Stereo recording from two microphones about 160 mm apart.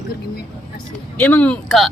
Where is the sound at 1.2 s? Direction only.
10° left (ahead or behind).